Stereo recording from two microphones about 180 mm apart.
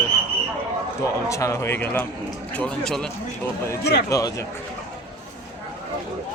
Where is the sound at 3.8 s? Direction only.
65° left (ahead or behind).